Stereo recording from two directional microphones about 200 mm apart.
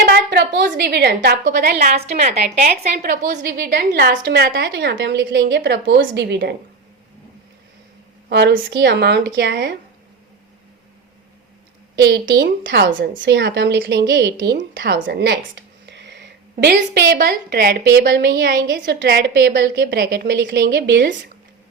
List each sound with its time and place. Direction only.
0.0 s a woman's voice: 55° right (ahead or behind)
2.0 s a woman's voice: 35° right (ahead or behind)
2.9 s a woman's voice: 45° right (ahead or behind); by 6.5 s 60° right (ahead or behind)
8.3 s a woman's voice: 60° right (ahead or behind)
11.9 s a woman's voice: 60° right (ahead or behind)